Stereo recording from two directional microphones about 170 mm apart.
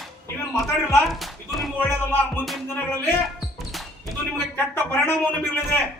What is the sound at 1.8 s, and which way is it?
Speech, 15° left (ahead or behind).